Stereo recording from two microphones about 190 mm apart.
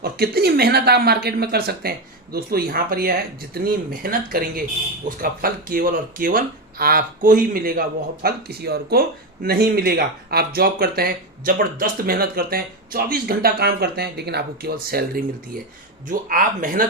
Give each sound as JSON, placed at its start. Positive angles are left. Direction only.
{"t": 0.0, "sound": "speech", "side_deg": -55}